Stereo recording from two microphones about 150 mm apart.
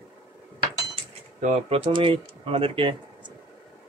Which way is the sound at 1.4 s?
50° right (ahead or behind).